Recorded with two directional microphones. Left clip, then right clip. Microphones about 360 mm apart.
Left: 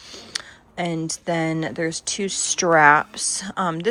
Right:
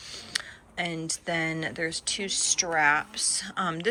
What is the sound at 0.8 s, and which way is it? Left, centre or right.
Speech, centre.